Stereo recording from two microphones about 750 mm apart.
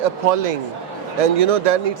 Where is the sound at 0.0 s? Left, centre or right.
Right.